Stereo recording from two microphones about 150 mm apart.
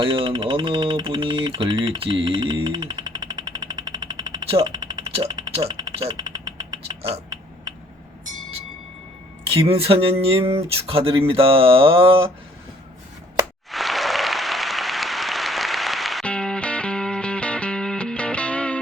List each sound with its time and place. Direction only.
0.0 s speech: 35° right (ahead or behind)
4.7 s a sound: 25° right (ahead or behind)
6.1 s vehicle: 25° right (ahead or behind)
9.5 s speech: 40° right (ahead or behind)
13.7 s applause: centre (ahead or behind)